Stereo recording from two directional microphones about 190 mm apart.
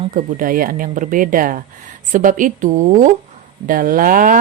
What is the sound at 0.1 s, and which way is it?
Speech, 45° right (ahead or behind).